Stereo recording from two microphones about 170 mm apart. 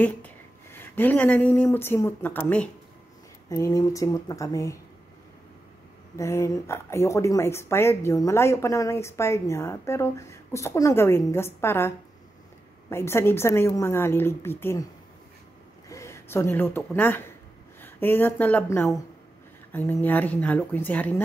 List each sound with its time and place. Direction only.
0.0 s speech: 10° left (ahead or behind)
6.1 s speech: 15° left (ahead or behind)
12.9 s speech: 15° left (ahead or behind)
15.9 s speech: 15° left (ahead or behind)